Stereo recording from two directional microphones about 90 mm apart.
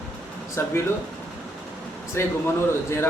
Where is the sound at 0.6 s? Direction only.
30° left (ahead or behind).